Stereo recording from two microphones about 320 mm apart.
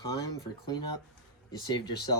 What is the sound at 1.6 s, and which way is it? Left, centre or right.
Speech, centre.